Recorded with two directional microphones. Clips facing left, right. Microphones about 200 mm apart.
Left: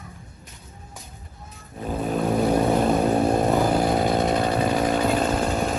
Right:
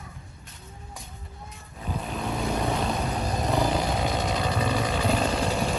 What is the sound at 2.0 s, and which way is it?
Vehicle, 45° left (ahead or behind).